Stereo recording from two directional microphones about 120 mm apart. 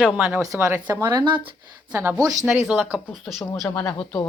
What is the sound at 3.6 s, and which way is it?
Speech, 10° left (ahead or behind).